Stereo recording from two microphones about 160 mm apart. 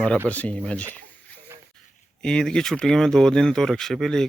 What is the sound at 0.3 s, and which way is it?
Speech, 10° left (ahead or behind).